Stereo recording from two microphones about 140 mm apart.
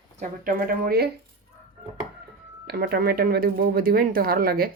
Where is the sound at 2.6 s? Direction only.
90° right.